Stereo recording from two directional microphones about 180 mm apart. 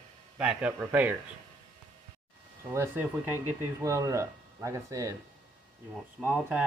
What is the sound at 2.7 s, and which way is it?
Speech, 10° right (ahead or behind).